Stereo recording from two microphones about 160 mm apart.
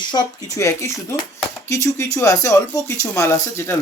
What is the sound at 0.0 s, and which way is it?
Speech, 25° left (ahead or behind).